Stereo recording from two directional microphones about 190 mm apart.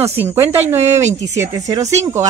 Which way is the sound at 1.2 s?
15° right (ahead or behind).